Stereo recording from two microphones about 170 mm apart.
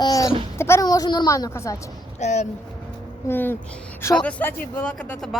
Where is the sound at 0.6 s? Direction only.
20° left (ahead or behind).